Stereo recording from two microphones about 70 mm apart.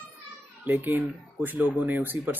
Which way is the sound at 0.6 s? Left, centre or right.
Right.